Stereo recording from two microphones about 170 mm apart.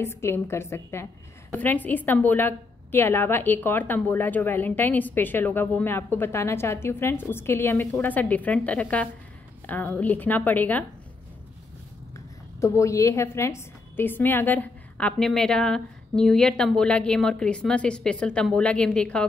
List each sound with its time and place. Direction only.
0.0 s a woman's voice: 15° left (ahead or behind)
12.5 s a woman's voice: 15° left (ahead or behind)